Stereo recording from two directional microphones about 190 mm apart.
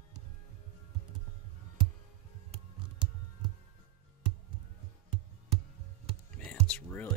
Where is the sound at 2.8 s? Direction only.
25° right (ahead or behind).